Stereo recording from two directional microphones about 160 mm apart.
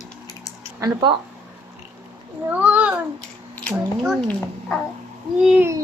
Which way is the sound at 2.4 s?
10° right (ahead or behind).